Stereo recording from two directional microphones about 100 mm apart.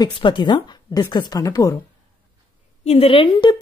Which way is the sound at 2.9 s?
75° left (ahead or behind).